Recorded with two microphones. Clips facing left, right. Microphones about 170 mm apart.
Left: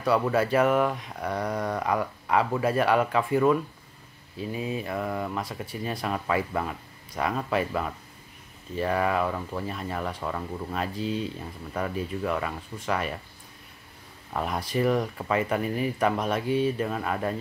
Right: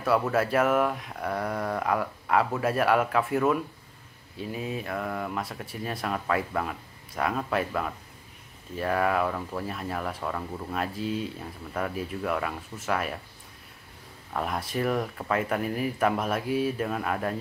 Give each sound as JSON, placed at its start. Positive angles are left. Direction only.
{"t": 0.0, "sound": "speech", "side_deg": -5}
{"t": 14.3, "sound": "speech", "side_deg": 0}